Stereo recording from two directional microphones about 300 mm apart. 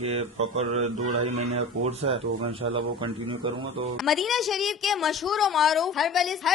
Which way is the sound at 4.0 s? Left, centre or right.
Centre.